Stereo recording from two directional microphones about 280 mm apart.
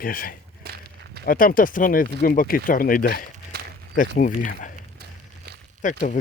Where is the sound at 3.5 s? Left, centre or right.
Right.